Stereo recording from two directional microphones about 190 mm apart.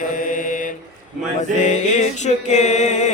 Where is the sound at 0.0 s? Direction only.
45° left (ahead or behind).